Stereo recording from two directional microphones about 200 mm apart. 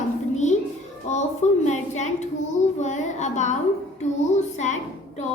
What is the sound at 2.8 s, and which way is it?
Child singing, 35° left (ahead or behind).